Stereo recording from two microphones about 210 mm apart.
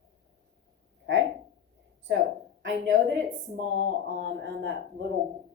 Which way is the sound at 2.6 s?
65° right (ahead or behind).